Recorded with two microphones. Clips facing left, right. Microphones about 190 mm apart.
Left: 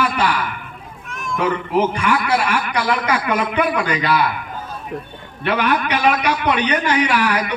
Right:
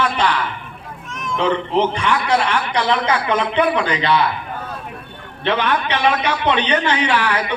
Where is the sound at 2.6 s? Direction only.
25° right (ahead or behind).